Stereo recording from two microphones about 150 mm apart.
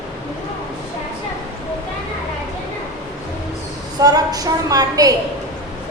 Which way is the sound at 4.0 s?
25° right (ahead or behind).